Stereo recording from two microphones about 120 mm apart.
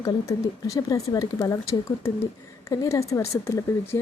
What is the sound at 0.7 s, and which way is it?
Speech, 25° left (ahead or behind).